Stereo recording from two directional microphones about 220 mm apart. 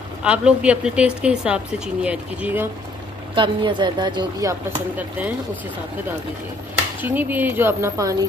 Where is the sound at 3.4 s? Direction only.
20° right (ahead or behind).